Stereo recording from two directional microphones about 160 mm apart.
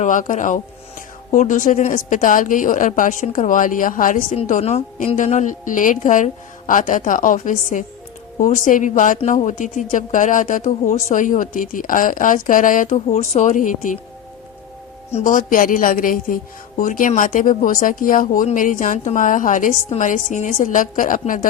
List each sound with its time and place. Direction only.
0.0 s speech: 55° left (ahead or behind)
15.1 s speech: 55° left (ahead or behind)